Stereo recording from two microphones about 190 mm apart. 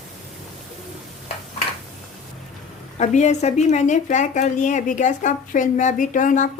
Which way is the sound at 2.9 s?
40° left (ahead or behind).